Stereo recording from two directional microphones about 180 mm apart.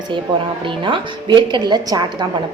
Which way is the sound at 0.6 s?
30° right (ahead or behind).